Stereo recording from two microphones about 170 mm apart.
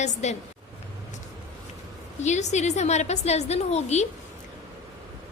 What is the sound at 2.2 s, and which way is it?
A woman's voice, 45° left (ahead or behind).